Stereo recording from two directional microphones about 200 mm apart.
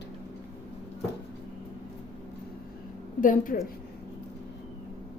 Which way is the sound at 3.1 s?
40° left (ahead or behind).